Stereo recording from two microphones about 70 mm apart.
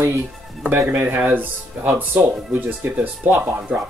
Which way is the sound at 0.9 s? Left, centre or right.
Right.